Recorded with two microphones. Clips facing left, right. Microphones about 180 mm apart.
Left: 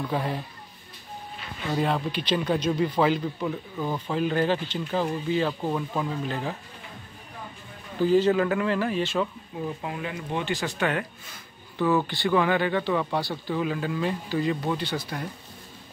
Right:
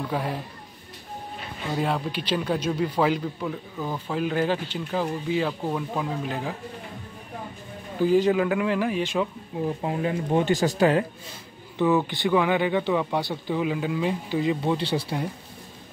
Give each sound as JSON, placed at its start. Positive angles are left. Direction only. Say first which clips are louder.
{"t": 0.1, "sound": "speech", "louder": "even", "side_deg": -5}
{"t": 1.7, "sound": "speech", "louder": "left 1 dB", "side_deg": -5}
{"t": 8.0, "sound": "speech", "louder": "even", "side_deg": -10}
{"t": 9.7, "sound": "speech", "louder": "right 7 dB", "side_deg": -30}
{"t": 12.1, "sound": "speech", "louder": "right 1 dB", "side_deg": -15}